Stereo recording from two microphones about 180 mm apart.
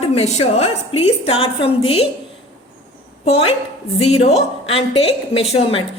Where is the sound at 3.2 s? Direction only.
35° left (ahead or behind).